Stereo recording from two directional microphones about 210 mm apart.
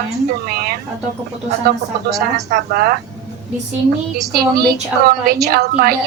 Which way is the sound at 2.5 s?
45° right (ahead or behind).